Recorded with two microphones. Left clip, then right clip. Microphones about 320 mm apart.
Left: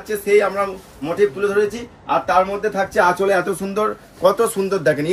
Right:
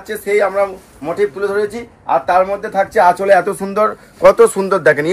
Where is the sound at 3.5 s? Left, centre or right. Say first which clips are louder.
Right 5 dB; centre.